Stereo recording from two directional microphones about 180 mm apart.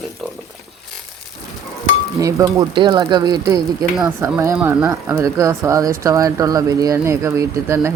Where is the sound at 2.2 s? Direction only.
20° right (ahead or behind).